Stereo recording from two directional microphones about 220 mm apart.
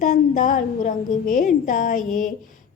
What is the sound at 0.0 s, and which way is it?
A woman's voice, 35° left (ahead or behind).